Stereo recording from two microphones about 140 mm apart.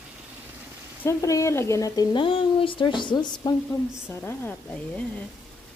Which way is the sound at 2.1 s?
40° left (ahead or behind).